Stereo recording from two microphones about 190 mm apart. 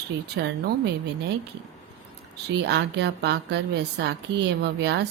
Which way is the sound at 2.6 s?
65° right (ahead or behind).